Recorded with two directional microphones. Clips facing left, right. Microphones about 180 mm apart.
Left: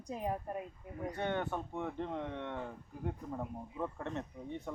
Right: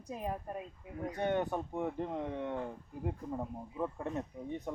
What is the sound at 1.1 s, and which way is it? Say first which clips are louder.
Speech: right 3 dB; 15° right (ahead or behind).